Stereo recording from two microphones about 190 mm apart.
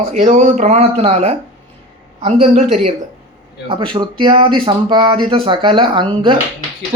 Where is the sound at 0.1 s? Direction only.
40° right (ahead or behind).